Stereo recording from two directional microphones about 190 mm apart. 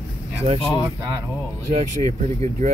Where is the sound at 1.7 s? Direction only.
35° right (ahead or behind).